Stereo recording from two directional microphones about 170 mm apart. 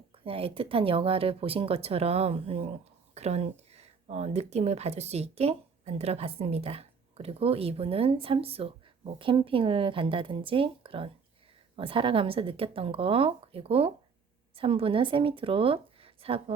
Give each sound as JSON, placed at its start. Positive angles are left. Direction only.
{"t": 0.3, "sound": "speech", "side_deg": -35}